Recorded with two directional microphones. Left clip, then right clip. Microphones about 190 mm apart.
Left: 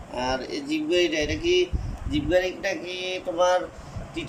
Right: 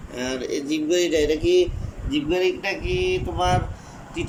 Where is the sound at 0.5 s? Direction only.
90° left.